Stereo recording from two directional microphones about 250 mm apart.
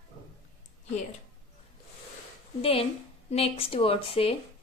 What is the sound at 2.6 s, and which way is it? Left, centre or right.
A woman's voice, left.